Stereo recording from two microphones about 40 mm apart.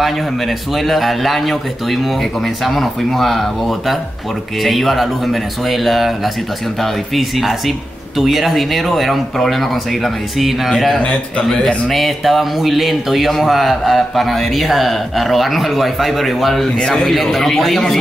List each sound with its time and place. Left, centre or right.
0.0 s speech: centre
11.0 s a man's voice: left
11.4 s speech: centre
16.6 s speech: centre